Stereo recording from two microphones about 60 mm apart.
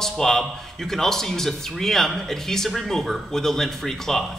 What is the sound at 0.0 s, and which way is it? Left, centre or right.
Speech, centre.